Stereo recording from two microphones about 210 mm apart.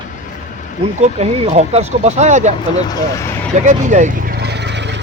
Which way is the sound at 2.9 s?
20° left (ahead or behind).